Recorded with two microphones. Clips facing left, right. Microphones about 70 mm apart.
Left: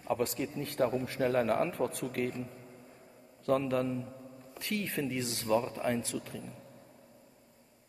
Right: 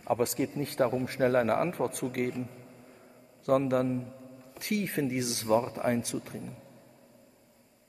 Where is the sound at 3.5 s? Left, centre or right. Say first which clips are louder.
Right 4 dB; right.